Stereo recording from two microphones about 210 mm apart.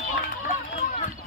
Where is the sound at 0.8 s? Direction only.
35° left (ahead or behind).